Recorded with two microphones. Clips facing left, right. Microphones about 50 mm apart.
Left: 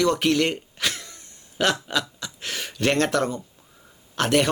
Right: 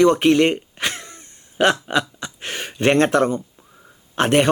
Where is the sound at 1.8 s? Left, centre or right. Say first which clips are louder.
Right 5 dB; right.